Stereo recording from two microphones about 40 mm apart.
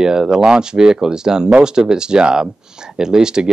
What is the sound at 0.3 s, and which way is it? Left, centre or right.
Speech, centre.